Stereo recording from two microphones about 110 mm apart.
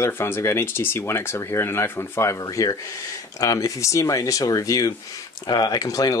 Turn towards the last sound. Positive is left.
turn(degrees=35)  # may be behind; listen again after turning